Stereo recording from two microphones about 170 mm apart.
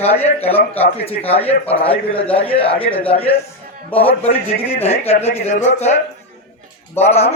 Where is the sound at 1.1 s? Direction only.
35° left (ahead or behind).